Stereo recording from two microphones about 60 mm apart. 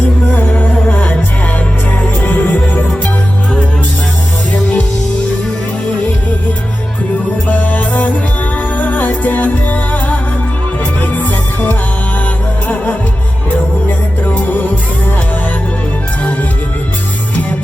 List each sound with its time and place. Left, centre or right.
0.3 s music: left
7.4 s music: left
14.3 s music: left